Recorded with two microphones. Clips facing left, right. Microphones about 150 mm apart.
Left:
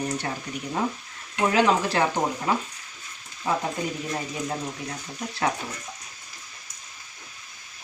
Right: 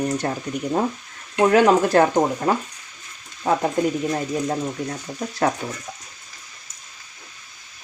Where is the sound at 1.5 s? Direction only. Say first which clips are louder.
Right 6 dB; 45° right (ahead or behind).